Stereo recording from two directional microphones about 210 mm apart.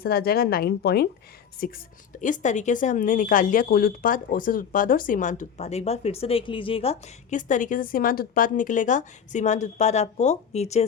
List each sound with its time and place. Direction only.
0.0 s a woman's voice: 45° left (ahead or behind); by 10.8 s 30° left (ahead or behind)